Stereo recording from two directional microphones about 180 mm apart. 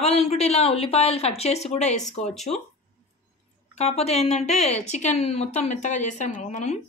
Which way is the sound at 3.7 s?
35° left (ahead or behind).